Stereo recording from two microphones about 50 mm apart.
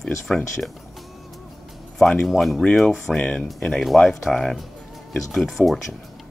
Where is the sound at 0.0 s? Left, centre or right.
Centre.